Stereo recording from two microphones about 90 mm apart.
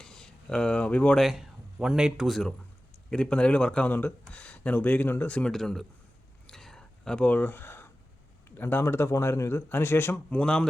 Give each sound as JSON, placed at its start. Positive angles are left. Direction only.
{"t": 0.0, "sound": "speech", "side_deg": 5}
{"t": 1.2, "sound": "speech", "side_deg": -5}
{"t": 3.1, "sound": "speech", "side_deg": 10}
{"t": 5.5, "sound": "speech", "side_deg": 5}
{"t": 6.5, "sound": "a sound", "side_deg": 5}
{"t": 8.4, "sound": "speech", "side_deg": 25}
{"t": 10.2, "sound": "speech", "side_deg": 10}